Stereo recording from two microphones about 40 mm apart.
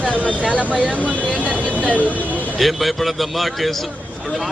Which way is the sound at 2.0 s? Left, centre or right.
Left.